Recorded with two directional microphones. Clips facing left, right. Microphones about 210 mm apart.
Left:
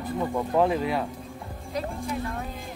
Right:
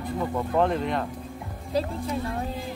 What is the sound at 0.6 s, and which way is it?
Speech, 5° left (ahead or behind).